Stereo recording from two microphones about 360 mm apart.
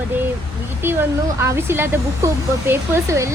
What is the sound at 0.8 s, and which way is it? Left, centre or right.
Speech, centre.